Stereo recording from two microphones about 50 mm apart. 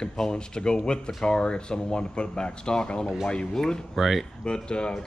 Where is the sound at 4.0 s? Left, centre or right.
Centre.